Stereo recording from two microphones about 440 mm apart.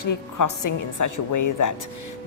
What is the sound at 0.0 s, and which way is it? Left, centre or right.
A woman's voice, left.